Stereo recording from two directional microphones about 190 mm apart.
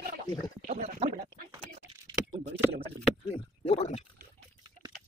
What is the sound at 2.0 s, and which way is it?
Computer keyboard, 20° right (ahead or behind).